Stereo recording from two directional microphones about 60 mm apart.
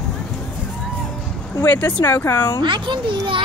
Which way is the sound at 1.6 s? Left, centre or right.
Left.